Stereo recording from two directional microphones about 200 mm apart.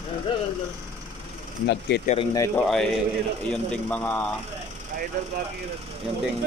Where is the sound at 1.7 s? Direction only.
55° left (ahead or behind).